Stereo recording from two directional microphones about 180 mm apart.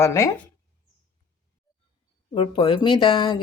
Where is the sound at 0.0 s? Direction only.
15° left (ahead or behind).